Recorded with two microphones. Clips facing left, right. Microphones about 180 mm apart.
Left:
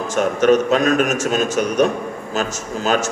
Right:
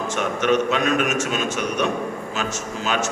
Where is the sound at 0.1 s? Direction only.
40° left (ahead or behind).